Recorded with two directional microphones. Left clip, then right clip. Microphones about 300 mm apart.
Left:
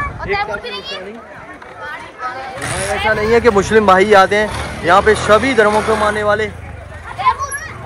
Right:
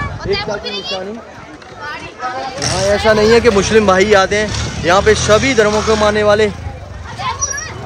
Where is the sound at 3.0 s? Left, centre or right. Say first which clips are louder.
Right 2 dB; centre.